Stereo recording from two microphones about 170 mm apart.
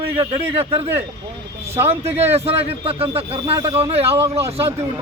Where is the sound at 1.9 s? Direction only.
35° right (ahead or behind).